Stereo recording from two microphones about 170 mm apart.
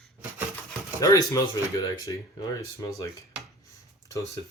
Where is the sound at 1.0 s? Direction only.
20° left (ahead or behind).